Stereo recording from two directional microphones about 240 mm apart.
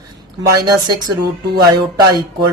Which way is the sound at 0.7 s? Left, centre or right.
Centre.